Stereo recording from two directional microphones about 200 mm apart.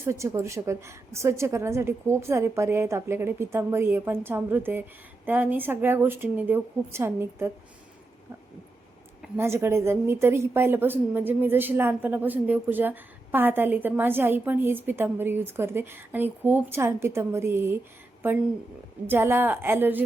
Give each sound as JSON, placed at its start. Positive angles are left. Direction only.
{"t": 0.0, "sound": "speech", "side_deg": -15}
{"t": 9.2, "sound": "speech", "side_deg": -10}
{"t": 19.0, "sound": "speech", "side_deg": -10}